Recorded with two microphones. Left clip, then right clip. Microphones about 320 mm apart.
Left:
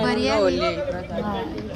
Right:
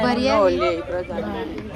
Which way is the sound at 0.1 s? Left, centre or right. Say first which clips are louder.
Right 2 dB; centre.